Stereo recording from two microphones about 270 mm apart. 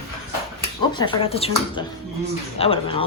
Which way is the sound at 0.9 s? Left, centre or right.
Centre.